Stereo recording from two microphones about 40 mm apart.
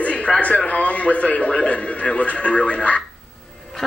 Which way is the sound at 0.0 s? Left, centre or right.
Left.